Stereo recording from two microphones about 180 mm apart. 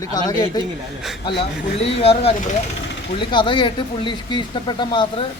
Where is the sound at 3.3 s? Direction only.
25° left (ahead or behind).